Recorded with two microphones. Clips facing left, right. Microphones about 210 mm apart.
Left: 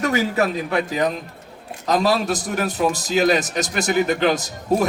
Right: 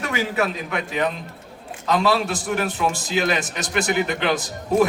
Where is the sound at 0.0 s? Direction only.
40° left (ahead or behind).